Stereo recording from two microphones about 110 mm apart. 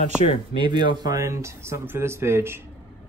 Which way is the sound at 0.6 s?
45° right (ahead or behind).